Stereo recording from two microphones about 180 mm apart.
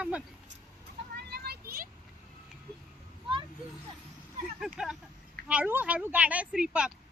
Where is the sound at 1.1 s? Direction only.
65° right (ahead or behind).